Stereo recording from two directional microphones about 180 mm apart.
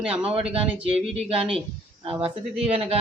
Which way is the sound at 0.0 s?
5° right (ahead or behind).